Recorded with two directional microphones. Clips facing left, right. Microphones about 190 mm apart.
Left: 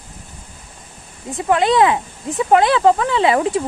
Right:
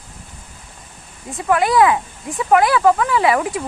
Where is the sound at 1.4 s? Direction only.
25° left (ahead or behind).